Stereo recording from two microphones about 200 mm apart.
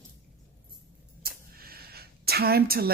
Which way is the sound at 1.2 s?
50° right (ahead or behind).